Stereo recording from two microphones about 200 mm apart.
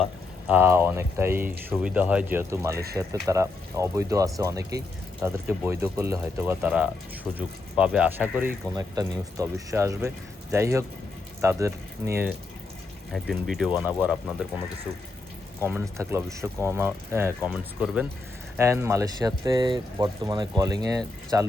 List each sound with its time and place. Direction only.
0.4 s speech: 10° right (ahead or behind)
13.1 s speech: centre (ahead or behind)
15.6 s speech: 10° right (ahead or behind)